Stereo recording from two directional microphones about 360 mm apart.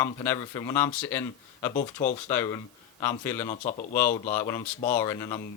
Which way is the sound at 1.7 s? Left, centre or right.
Left.